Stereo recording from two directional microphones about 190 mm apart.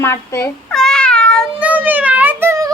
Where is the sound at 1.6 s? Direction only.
10° right (ahead or behind).